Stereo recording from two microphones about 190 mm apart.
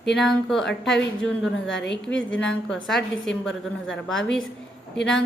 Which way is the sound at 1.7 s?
65° left (ahead or behind).